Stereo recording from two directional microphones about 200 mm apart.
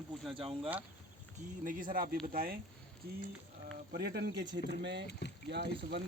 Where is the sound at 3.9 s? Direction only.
55° right (ahead or behind).